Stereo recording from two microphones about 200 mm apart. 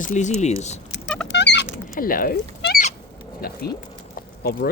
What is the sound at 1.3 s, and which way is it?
Rodents, 60° left (ahead or behind).